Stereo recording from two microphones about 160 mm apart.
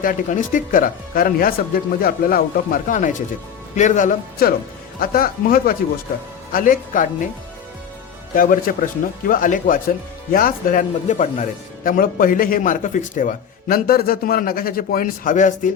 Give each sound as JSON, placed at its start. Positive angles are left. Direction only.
{"t": 0.0, "sound": "speech", "side_deg": 55}
{"t": 8.4, "sound": "speech", "side_deg": 60}